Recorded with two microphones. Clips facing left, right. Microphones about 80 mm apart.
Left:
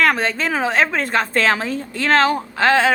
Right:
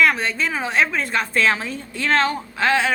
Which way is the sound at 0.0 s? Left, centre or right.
Left.